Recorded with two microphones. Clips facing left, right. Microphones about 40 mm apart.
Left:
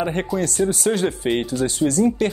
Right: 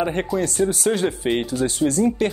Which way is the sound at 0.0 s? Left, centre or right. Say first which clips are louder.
Even; centre.